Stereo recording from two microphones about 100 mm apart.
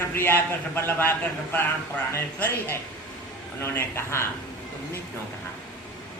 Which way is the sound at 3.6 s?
25° left (ahead or behind).